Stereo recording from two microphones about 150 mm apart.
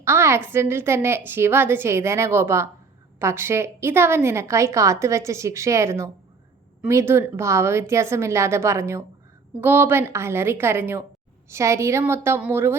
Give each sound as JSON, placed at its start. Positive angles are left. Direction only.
{"t": 0.0, "sound": "a woman's voice", "side_deg": -15}